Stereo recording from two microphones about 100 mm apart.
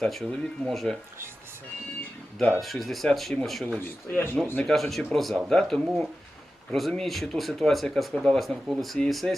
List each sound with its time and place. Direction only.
0.0 s speech: 5° left (ahead or behind)
2.4 s speech: 5° left (ahead or behind)
3.8 s speech: 20° left (ahead or behind)
4.5 s speech: centre (ahead or behind)